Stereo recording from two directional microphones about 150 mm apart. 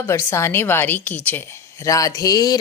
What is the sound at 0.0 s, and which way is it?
A woman's voice, 15° left (ahead or behind).